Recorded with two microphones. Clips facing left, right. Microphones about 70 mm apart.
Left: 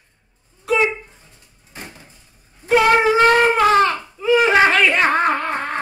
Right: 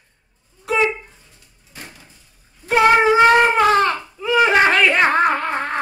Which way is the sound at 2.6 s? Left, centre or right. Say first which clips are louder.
Even; centre.